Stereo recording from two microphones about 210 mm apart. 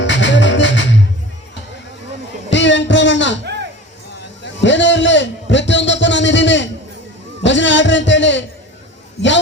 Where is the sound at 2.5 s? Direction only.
60° left (ahead or behind).